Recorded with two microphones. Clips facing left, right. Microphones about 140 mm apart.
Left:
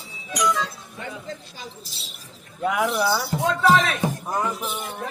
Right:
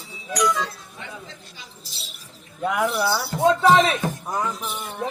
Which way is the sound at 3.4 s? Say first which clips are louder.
Right 4 dB; 20° right (ahead or behind).